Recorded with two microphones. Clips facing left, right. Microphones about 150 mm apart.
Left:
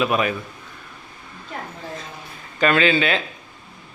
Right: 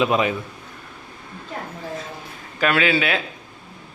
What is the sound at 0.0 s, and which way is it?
Speech, 20° right (ahead or behind).